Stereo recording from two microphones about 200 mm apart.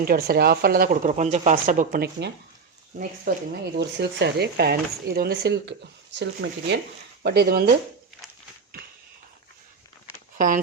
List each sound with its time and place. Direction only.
0.0 s a woman's voice: 50° right (ahead or behind)
0.9 s a woman's voice: 35° right (ahead or behind)
10.3 s speech: 40° right (ahead or behind)